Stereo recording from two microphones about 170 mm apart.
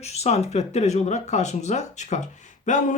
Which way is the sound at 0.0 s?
40° left (ahead or behind).